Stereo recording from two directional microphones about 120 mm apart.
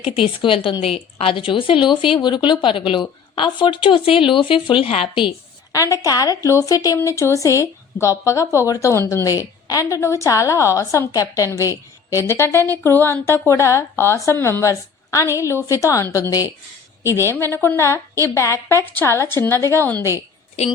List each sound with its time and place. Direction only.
0.0 s speech: 50° left (ahead or behind)
5.7 s a woman's voice: 25° left (ahead or behind)